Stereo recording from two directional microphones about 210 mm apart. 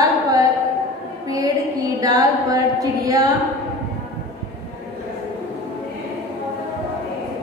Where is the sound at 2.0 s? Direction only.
15° right (ahead or behind).